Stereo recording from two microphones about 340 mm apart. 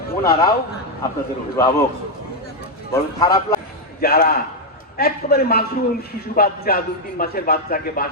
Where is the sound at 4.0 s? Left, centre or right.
Left.